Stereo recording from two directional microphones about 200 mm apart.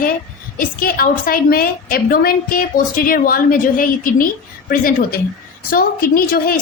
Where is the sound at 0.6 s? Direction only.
45° left (ahead or behind).